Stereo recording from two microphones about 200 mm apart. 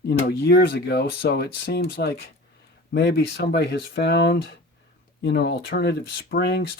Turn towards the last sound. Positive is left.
turn(degrees=55)  # may be behind; listen again after turning